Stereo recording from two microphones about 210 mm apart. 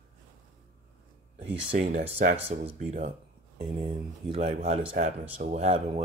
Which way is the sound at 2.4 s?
30° right (ahead or behind).